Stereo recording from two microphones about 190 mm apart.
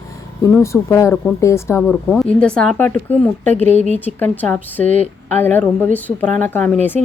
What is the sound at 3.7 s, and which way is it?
Speech, 35° left (ahead or behind).